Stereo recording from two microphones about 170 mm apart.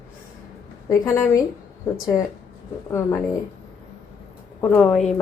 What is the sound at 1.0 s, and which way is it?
Speech, 15° left (ahead or behind).